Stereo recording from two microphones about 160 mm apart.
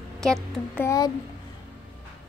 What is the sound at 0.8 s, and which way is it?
Speech, 20° left (ahead or behind).